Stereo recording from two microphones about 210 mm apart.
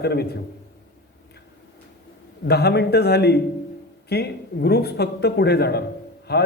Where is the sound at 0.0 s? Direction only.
50° left (ahead or behind).